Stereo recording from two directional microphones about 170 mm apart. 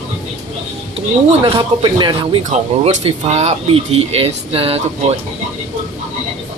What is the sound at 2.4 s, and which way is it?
Speech, 40° right (ahead or behind).